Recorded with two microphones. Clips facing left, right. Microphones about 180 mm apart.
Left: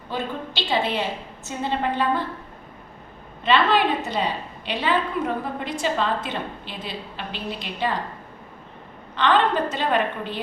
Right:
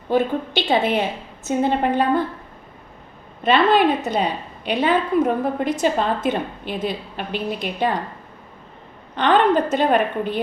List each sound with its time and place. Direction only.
0.1 s a woman's voice: 50° right (ahead or behind)
3.4 s a woman's voice: 45° right (ahead or behind)
9.1 s a woman's voice: 50° right (ahead or behind)